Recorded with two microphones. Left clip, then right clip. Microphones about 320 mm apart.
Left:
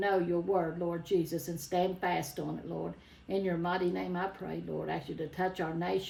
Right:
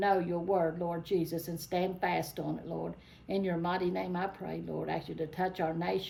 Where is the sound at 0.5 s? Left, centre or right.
Centre.